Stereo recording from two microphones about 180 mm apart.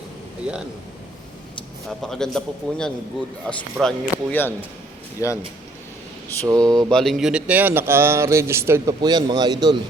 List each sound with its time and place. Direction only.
1.9 s a man's voice: 5° left (ahead or behind)
6.5 s mantra: 20° right (ahead or behind)
6.9 s speech: centre (ahead or behind); by 9.7 s 25° right (ahead or behind)